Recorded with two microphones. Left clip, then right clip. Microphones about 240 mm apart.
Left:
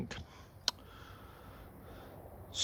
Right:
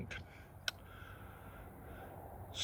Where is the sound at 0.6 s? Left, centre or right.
Centre.